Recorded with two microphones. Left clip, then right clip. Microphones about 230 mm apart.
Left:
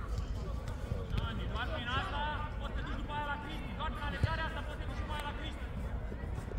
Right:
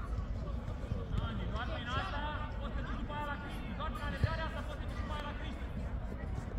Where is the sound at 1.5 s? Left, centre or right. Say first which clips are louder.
Left 3 dB; left.